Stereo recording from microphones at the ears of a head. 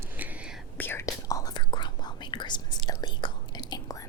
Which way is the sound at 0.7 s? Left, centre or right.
Left.